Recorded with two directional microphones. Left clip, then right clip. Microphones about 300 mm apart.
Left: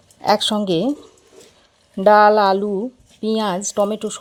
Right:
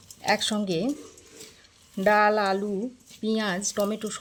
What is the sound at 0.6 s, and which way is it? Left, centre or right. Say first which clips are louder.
Speech: left 9 dB; centre.